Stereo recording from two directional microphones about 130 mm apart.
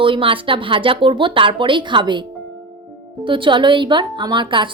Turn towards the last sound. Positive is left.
turn(degrees=-40)  # may be behind; listen again after turning